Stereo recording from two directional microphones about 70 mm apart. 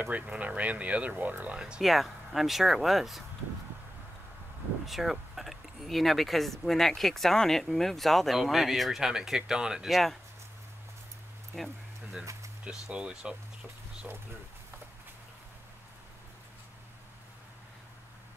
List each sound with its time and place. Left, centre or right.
0.4 s speech: right
1.8 s speech: centre
4.8 s speech: centre
11.5 s a sound: centre
12.9 s speech: centre